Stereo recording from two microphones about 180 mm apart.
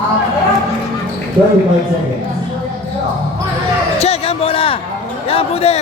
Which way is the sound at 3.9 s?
35° left (ahead or behind).